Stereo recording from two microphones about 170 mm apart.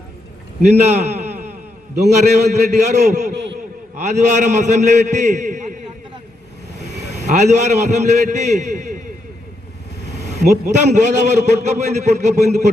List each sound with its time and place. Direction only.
0.6 s a man's voice: 40° right (ahead or behind)
7.3 s a man's voice: 45° right (ahead or behind)
10.4 s a man's voice: 45° right (ahead or behind)